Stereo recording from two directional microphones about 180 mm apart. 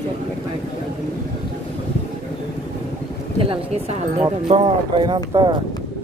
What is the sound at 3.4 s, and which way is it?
Speech, 35° right (ahead or behind).